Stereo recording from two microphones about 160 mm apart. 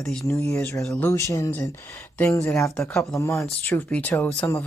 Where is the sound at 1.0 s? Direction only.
20° left (ahead or behind).